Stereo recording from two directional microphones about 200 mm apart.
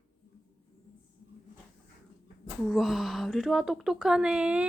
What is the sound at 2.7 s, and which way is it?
Speech, centre (ahead or behind).